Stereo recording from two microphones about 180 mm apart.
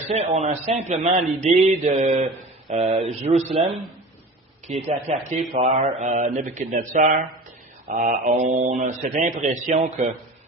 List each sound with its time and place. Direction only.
0.1 s a man's voice: 35° right (ahead or behind)
4.7 s a man's voice: 40° right (ahead or behind)